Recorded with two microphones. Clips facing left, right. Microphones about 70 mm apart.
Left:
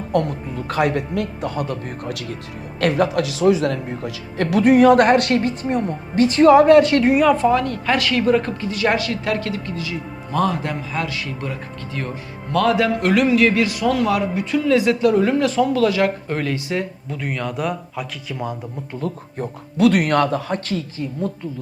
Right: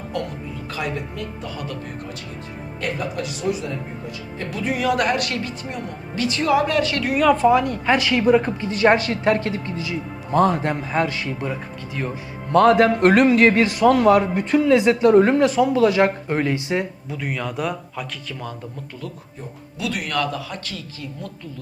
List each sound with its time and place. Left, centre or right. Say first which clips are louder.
0.1 s speech: left 8 dB; left
2.8 s speech: left 8 dB; left
7.2 s a man's voice: even; centre
7.5 s speech: right 1 dB; centre
8.7 s a man's voice: right 3 dB; right
14.7 s speech: right 1 dB; right
15.4 s speech: even; centre
17.1 s a man's voice: left 1 dB; centre
18.3 s speech: left 5 dB; centre
19.1 s speech: left 10 dB; left
19.4 s speech: left 13 dB; left